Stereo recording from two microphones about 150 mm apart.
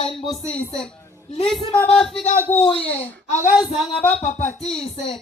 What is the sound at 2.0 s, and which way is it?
Speech, 5° left (ahead or behind).